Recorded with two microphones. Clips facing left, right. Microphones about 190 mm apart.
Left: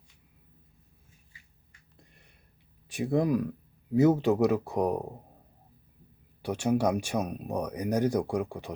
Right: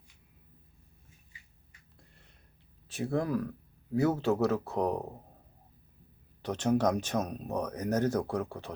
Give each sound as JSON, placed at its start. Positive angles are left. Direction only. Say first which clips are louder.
{"t": 2.0, "sound": "a sound", "louder": "left 2 dB", "side_deg": 15}
{"t": 2.9, "sound": "speech", "louder": "left 4 dB", "side_deg": 15}
{"t": 6.4, "sound": "speech", "louder": "left 1 dB", "side_deg": 10}